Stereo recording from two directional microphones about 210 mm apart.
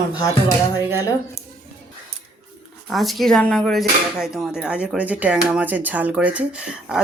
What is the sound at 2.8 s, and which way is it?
Speech, centre (ahead or behind).